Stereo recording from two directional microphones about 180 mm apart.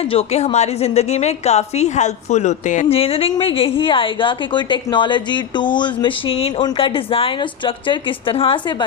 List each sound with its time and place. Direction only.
0.0 s a woman's voice: 35° left (ahead or behind)